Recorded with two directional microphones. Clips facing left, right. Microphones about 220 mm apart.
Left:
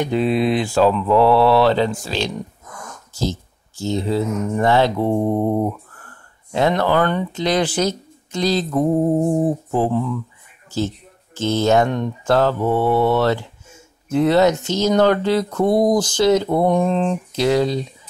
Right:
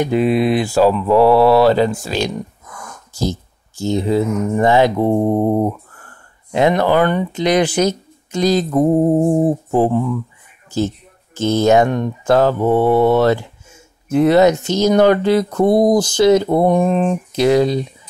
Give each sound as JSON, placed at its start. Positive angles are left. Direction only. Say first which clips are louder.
{"t": 0.0, "sound": "speech", "louder": "right 3 dB", "side_deg": -10}
{"t": 8.6, "sound": "music", "louder": "right 4 dB", "side_deg": -25}
{"t": 9.7, "sound": "speech", "louder": "right 4 dB", "side_deg": -15}
{"t": 11.3, "sound": "speech", "louder": "right 4 dB", "side_deg": -15}